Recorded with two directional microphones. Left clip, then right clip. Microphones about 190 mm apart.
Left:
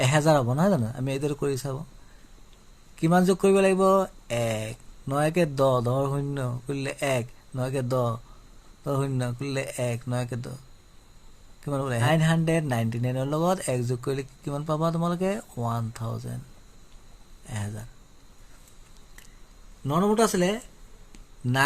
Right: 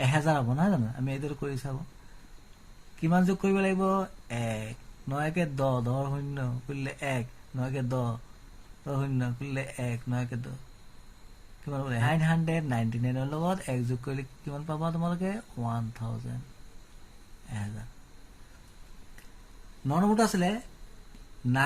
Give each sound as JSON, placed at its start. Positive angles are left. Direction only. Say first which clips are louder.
{"t": 0.0, "sound": "speech", "louder": "left 6 dB", "side_deg": 45}
{"t": 3.0, "sound": "speech", "louder": "left 7 dB", "side_deg": 45}
{"t": 11.6, "sound": "speech", "louder": "left 5 dB", "side_deg": 45}
{"t": 19.9, "sound": "speech", "louder": "left 4 dB", "side_deg": 40}